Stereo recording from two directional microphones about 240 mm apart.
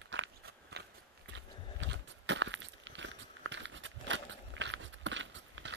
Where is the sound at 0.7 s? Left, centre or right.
Right.